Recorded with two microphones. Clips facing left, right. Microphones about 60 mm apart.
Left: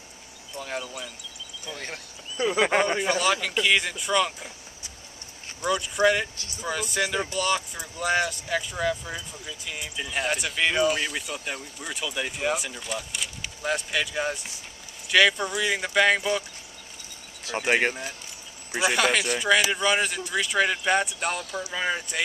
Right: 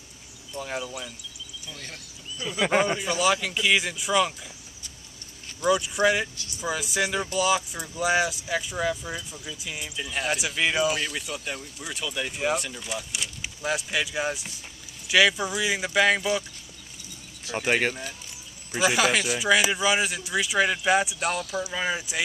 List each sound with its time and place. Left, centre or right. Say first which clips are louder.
0.6 s speech: right 1 dB; centre
2.3 s speech: left 8 dB; left
3.2 s speech: even; centre
5.7 s speech: even; centre
11.0 s speech: left 1 dB; centre
17.6 s speech: left 1 dB; centre